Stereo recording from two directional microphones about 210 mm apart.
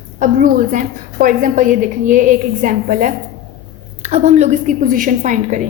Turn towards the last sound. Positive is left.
turn(degrees=-35)  # may be behind; listen again after turning